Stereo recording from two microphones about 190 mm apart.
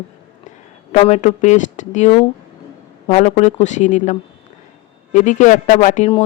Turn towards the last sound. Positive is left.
turn(degrees=40)  # may be behind; listen again after turning